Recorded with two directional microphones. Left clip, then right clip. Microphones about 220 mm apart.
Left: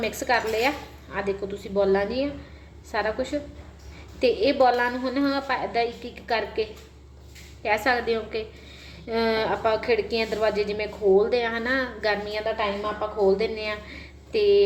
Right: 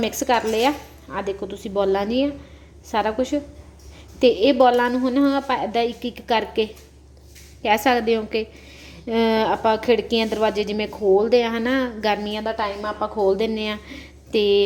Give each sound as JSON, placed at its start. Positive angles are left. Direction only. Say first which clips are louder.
{"t": 0.0, "sound": "a woman's voice", "louder": "right 4 dB", "side_deg": -35}